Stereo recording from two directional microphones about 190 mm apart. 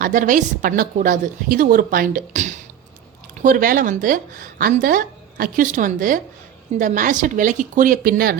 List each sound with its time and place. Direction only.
0.0 s speech: 45° right (ahead or behind)